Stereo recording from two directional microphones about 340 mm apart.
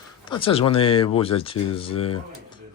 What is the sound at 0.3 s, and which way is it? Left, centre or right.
A man's voice, centre.